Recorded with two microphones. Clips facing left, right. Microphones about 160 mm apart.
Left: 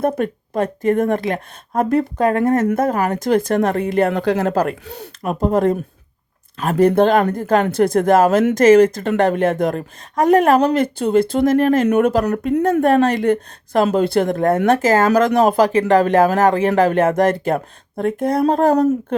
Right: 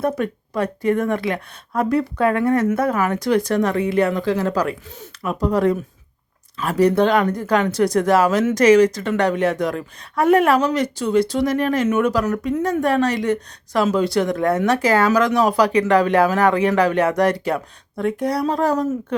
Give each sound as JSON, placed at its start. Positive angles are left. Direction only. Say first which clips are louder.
{"t": 0.2, "sound": "speech", "louder": "left 2 dB", "side_deg": 45}
{"t": 5.2, "sound": "speech", "louder": "left 2 dB", "side_deg": 45}